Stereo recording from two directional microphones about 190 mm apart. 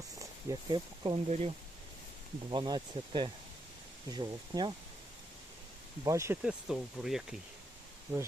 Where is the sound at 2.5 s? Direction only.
20° right (ahead or behind).